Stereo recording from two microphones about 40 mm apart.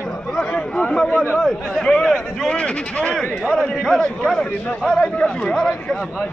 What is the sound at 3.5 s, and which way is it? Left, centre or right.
A man's voice, centre.